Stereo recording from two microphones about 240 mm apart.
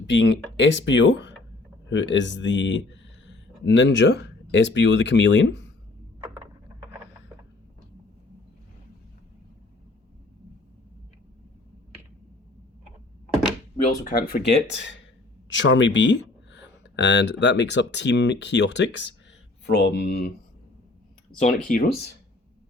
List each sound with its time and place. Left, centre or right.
0.1 s speech: left
6.1 s a sound: centre
13.8 s speech: left
21.4 s speech: left